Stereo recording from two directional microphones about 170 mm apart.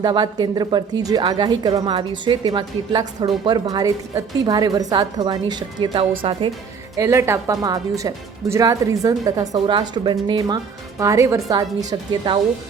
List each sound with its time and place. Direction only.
0.0 s speech: 25° right (ahead or behind)
6.9 s speech: 15° right (ahead or behind)